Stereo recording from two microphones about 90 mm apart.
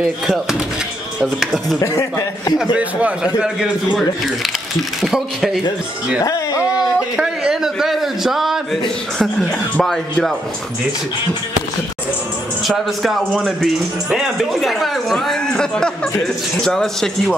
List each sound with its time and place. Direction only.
0.0 s a man's voice: 5° right (ahead or behind)
1.8 s a man's voice: 35° left (ahead or behind)
3.3 s a man's voice: 10° right (ahead or behind)
6.2 s speech: 40° left (ahead or behind)
7.2 s a man's voice: 5° right (ahead or behind)
12.6 s a man's voice: centre (ahead or behind)